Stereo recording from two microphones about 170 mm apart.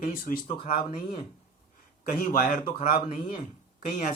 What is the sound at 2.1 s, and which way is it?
Speech, 55° left (ahead or behind).